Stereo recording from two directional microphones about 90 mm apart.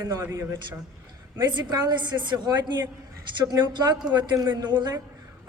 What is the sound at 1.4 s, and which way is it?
A woman's voice, 55° right (ahead or behind).